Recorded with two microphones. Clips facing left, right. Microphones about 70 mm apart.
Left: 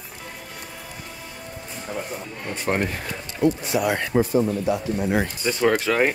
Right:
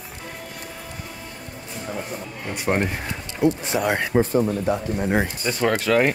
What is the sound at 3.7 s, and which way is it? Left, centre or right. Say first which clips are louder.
Speech: even; right.